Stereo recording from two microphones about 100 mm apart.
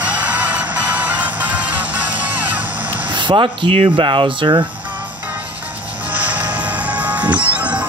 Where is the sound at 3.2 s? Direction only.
55° right (ahead or behind).